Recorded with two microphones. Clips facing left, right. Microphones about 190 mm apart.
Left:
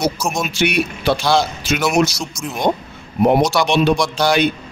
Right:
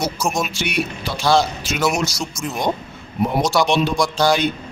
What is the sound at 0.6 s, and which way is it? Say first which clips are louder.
Speech: left 5 dB; 65° left (ahead or behind).